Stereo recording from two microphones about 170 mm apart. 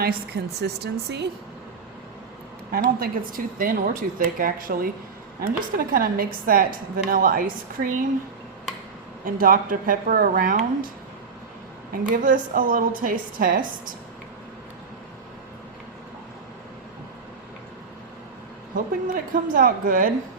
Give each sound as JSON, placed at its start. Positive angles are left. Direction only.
{"t": 0.0, "sound": "a woman's voice", "side_deg": -70}
{"t": 2.7, "sound": "a woman's voice", "side_deg": -60}
{"t": 9.2, "sound": "a woman's voice", "side_deg": -55}
{"t": 12.0, "sound": "a woman's voice", "side_deg": -50}
{"t": 19.0, "sound": "a woman's voice", "side_deg": -55}